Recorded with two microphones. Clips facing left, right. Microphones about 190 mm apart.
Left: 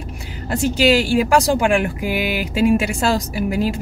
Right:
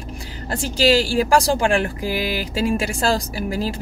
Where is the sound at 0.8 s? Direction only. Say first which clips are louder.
Left 1 dB; 35° right (ahead or behind).